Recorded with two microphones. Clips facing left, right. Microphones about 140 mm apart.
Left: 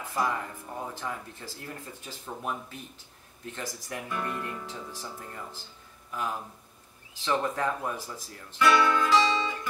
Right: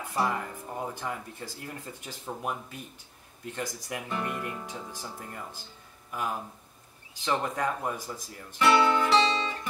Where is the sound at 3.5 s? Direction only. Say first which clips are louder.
Right 2 dB; 15° right (ahead or behind).